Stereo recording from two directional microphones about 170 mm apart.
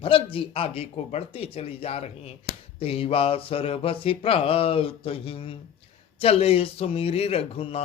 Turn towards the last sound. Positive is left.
turn(degrees=35)  # may be behind; listen again after turning